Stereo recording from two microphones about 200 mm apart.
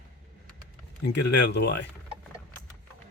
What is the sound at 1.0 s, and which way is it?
Speech, 60° left (ahead or behind).